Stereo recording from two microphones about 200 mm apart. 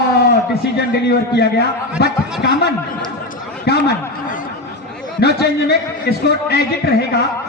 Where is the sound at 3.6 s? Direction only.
55° left (ahead or behind).